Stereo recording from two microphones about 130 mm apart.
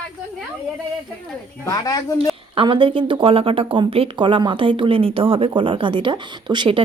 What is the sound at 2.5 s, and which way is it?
Speech, 40° right (ahead or behind).